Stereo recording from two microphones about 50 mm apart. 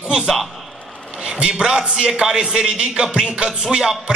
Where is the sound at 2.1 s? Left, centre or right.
Centre.